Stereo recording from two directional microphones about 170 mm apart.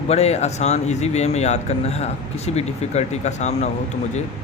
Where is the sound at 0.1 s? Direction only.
40° left (ahead or behind).